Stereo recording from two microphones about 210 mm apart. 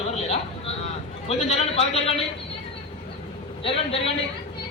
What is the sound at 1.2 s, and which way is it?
Speech, 30° left (ahead or behind).